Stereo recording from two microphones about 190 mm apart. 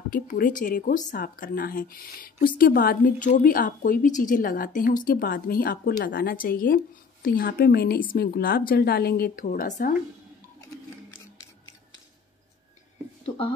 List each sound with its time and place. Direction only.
0.1 s a woman's voice: 45° left (ahead or behind)